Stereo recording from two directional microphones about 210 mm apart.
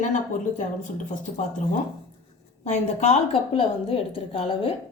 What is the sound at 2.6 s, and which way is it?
A woman's voice, 30° left (ahead or behind).